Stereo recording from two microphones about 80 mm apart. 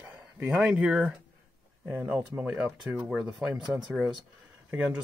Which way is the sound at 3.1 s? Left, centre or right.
Centre.